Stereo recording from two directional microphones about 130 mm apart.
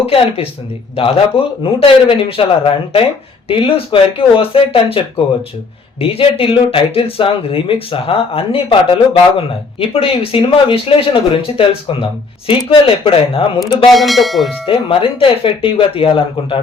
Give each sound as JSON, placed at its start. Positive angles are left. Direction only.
{"t": 0.0, "sound": "speech", "side_deg": 50}
{"t": 13.9, "sound": "speech", "side_deg": 0}
{"t": 14.7, "sound": "speech", "side_deg": 45}